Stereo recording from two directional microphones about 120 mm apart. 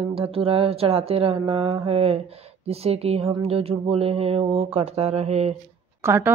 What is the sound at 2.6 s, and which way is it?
Speech, 55° right (ahead or behind).